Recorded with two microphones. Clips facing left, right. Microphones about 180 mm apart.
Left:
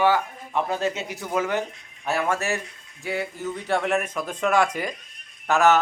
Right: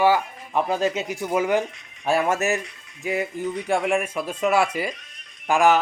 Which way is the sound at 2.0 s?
25° right (ahead or behind).